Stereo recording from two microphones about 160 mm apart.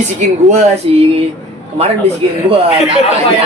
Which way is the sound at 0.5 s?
40° right (ahead or behind).